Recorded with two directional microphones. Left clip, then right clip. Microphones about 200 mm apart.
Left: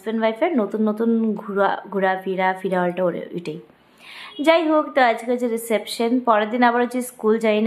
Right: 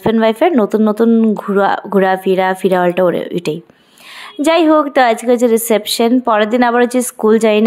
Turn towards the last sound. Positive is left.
turn(degrees=-40)  # may be behind; listen again after turning